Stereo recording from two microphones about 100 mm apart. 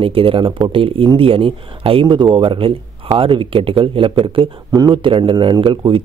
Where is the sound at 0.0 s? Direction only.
65° right (ahead or behind).